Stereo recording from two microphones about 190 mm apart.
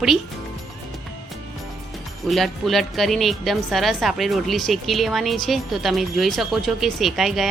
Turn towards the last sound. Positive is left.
turn(degrees=0)  # may be behind; listen again after turning